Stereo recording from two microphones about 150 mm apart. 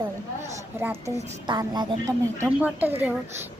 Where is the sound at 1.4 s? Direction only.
30° right (ahead or behind).